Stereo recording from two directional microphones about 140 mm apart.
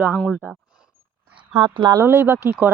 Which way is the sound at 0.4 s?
15° right (ahead or behind).